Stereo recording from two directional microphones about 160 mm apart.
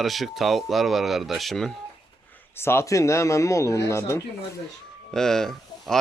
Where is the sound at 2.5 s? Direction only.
15° left (ahead or behind).